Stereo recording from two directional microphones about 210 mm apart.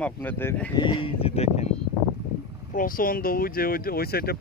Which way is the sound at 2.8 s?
40° left (ahead or behind).